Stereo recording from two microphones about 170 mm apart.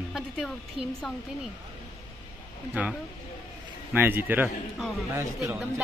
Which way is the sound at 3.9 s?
10° right (ahead or behind).